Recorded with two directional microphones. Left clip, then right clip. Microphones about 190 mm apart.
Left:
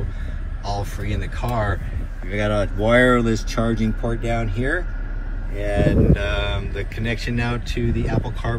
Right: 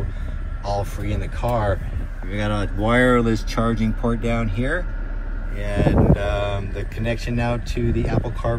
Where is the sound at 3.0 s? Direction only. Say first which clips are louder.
Right 1 dB; 30° right (ahead or behind).